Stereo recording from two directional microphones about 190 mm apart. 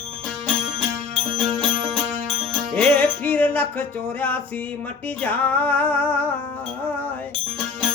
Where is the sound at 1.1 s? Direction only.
25° right (ahead or behind).